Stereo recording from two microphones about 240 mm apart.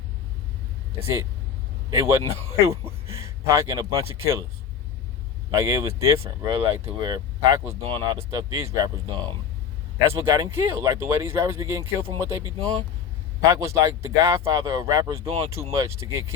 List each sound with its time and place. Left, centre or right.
1.9 s speech: centre
5.5 s speech: centre
13.4 s speech: centre